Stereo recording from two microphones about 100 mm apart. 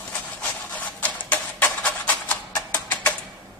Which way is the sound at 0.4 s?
15° left (ahead or behind).